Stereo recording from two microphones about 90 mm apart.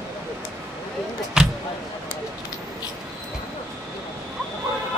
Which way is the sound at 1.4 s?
10° right (ahead or behind).